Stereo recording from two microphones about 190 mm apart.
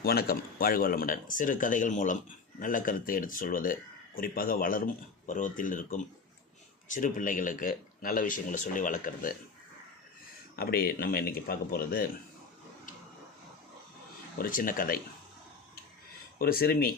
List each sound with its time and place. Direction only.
0.0 s speech: 55° left (ahead or behind)
10.5 s speech: 55° left (ahead or behind)
14.3 s speech: 45° left (ahead or behind)
16.4 s speech: 50° left (ahead or behind)